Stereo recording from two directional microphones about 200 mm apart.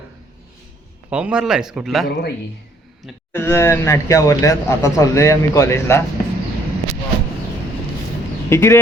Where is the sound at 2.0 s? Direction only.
50° left (ahead or behind).